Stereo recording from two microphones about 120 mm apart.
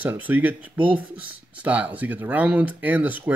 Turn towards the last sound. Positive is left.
turn(degrees=-15)  # may be behind; listen again after turning